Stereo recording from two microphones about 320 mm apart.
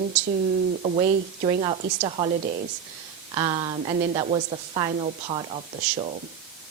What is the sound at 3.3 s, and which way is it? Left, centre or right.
Speech, centre.